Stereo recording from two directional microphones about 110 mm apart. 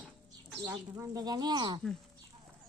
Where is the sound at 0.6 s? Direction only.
25° right (ahead or behind); by 1.8 s 40° right (ahead or behind).